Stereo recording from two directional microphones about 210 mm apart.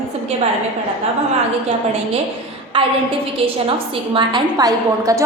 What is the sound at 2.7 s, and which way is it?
Speech, 25° right (ahead or behind).